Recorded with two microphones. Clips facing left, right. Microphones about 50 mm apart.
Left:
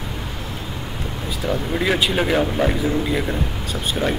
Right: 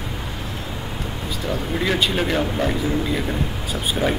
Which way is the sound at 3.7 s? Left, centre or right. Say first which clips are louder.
Even; centre.